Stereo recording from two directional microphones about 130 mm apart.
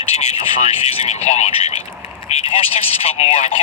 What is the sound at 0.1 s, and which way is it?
Speech, 55° left (ahead or behind).